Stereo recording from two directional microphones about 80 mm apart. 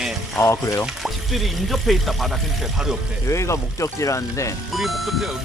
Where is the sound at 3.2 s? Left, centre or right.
Left.